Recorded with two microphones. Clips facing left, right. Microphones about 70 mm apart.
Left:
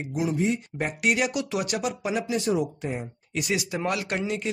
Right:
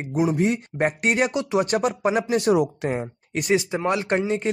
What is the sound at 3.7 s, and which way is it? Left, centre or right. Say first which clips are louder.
Speech: right 5 dB; right.